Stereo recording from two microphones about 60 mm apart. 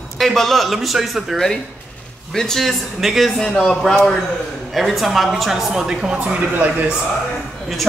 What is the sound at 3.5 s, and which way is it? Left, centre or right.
Speech, centre.